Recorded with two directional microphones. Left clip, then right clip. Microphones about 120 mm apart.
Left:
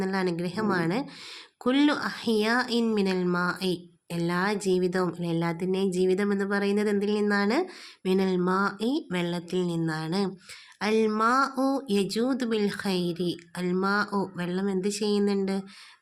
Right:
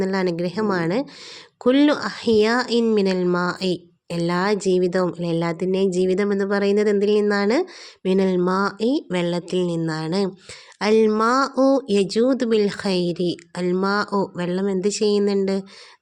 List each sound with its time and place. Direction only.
0.0 s speech: 30° right (ahead or behind)